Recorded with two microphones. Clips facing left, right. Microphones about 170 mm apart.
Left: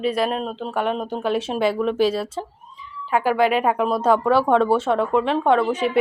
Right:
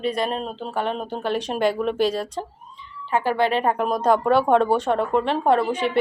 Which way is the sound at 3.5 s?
5° left (ahead or behind).